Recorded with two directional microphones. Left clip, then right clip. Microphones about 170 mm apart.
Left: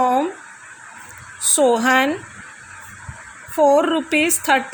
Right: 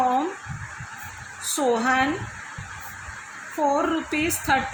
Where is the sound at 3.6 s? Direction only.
60° left (ahead or behind).